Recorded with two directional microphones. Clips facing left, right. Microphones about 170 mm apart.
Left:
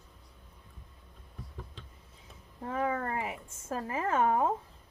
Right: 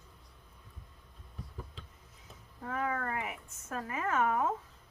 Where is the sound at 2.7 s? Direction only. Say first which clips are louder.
Left 3 dB; 25° left (ahead or behind).